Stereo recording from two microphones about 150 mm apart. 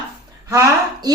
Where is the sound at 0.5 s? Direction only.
20° right (ahead or behind).